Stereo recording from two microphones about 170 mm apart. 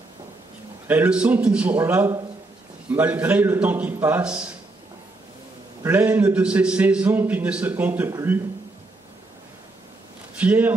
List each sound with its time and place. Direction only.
0.8 s a man's voice: 10° right (ahead or behind)
5.9 s a man's voice: 10° right (ahead or behind)
10.4 s a man's voice: 10° right (ahead or behind)